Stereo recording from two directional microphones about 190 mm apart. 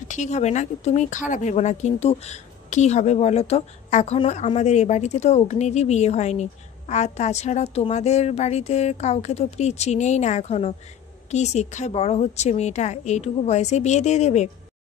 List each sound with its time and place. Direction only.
0.1 s speech: 40° left (ahead or behind)